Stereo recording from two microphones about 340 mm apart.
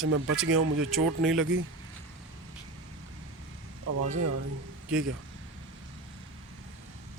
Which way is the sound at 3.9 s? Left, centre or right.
Right.